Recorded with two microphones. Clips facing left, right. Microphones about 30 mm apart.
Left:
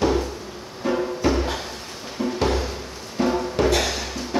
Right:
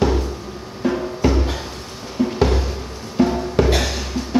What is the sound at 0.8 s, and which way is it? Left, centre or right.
Music, centre.